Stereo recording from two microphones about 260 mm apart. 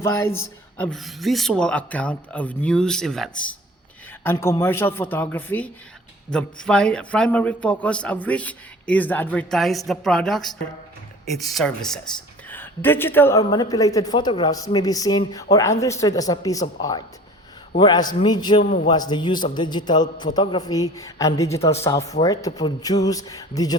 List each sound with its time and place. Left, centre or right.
0.0 s a man's voice: centre